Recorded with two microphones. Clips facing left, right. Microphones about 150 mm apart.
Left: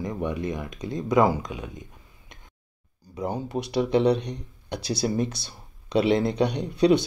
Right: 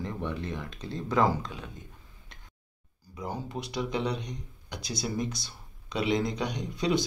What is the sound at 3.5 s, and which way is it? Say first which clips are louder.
Speech: left 11 dB; 70° left (ahead or behind).